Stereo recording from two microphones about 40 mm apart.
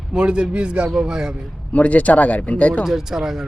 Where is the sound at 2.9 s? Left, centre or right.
Centre.